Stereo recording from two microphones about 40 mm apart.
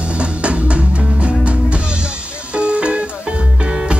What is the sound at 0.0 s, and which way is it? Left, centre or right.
Music, right.